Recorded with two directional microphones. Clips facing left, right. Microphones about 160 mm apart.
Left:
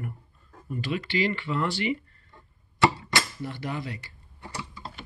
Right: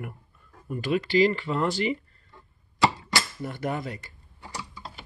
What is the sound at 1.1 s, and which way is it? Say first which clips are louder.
Speech: right 6 dB; 40° right (ahead or behind).